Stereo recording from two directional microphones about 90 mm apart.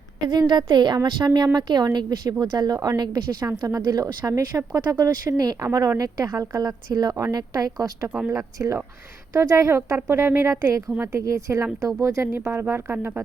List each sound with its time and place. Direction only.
0.3 s a woman's voice: 55° right (ahead or behind)
5.6 s speech: 35° right (ahead or behind)